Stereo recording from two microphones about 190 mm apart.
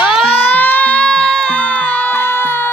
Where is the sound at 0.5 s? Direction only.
10° left (ahead or behind).